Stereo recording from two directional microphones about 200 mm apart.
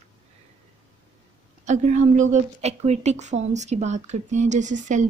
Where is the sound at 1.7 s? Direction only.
40° right (ahead or behind).